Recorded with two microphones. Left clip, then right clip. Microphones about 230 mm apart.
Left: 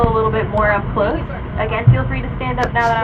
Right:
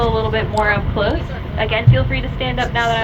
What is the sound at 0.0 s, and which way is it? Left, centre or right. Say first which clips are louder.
Vehicle: left 2 dB; right.